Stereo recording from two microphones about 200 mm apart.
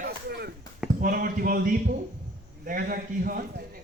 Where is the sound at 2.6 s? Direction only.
45° right (ahead or behind).